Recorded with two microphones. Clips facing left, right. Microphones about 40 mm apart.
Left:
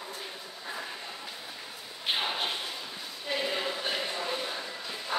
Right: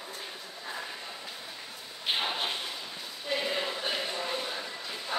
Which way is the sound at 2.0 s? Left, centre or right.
Centre.